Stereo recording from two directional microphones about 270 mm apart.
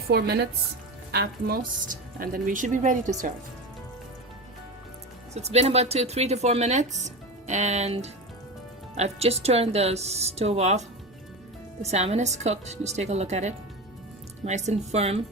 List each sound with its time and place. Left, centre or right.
0.1 s speech: right
5.3 s speech: right